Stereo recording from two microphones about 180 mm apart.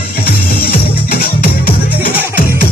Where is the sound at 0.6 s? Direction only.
60° left (ahead or behind).